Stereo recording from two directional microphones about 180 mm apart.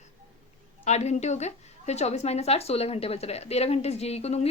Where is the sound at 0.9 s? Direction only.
40° left (ahead or behind).